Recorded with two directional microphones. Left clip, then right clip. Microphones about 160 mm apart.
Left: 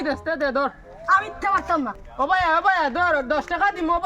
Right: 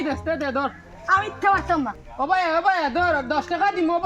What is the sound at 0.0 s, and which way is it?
Speech, 20° left (ahead or behind).